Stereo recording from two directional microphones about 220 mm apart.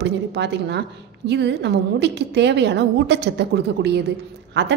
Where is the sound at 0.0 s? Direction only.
50° right (ahead or behind).